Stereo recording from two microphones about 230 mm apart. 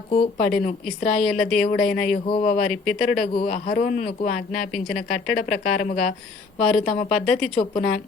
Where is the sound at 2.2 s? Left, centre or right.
Left.